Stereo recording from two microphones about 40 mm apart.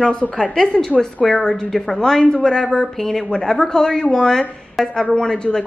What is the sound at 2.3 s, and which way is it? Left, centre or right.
Speech, centre.